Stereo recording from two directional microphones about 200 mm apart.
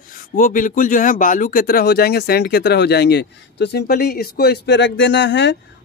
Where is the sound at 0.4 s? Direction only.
40° left (ahead or behind).